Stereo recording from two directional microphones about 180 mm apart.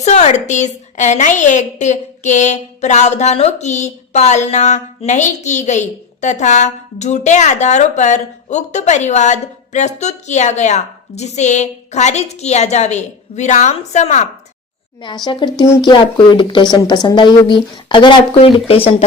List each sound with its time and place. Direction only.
0.0 s a woman's voice: 40° left (ahead or behind)
15.0 s a woman's voice: 25° left (ahead or behind)